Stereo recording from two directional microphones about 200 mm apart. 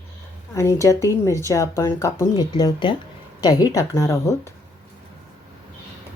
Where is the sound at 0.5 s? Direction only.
15° left (ahead or behind).